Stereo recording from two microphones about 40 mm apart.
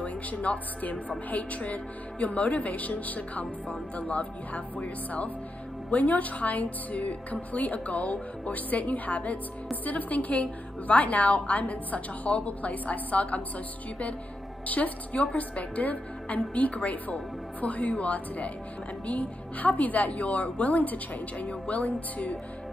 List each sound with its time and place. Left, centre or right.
0.0 s a woman's voice: left
14.7 s a woman's voice: left